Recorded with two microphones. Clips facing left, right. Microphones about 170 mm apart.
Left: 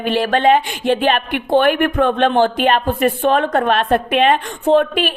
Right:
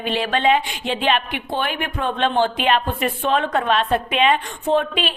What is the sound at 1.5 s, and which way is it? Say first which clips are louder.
A woman's voice: left 12 dB; 60° left (ahead or behind).